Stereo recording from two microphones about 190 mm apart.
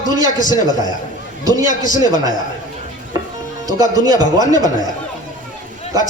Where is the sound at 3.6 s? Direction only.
20° right (ahead or behind).